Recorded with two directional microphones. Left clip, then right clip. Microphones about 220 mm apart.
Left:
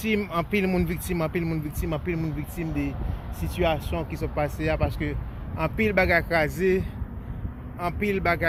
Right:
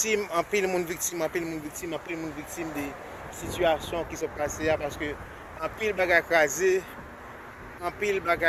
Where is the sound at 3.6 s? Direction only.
5° left (ahead or behind).